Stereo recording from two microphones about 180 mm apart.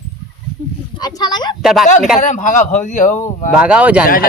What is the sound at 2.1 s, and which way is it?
A man's voice, 45° left (ahead or behind).